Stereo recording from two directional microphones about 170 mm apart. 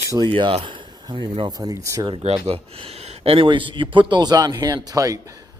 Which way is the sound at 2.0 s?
30° right (ahead or behind).